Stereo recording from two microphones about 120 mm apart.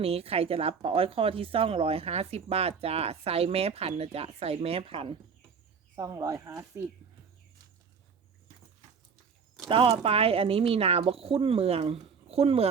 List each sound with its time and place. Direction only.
0.0 s speech: 55° right (ahead or behind)
6.0 s speech: 30° right (ahead or behind)
9.6 s speech: 50° right (ahead or behind)